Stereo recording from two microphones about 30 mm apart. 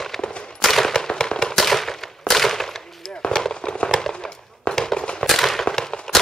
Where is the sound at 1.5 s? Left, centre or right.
Centre.